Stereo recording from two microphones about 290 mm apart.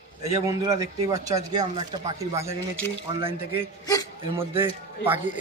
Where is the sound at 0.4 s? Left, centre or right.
Centre.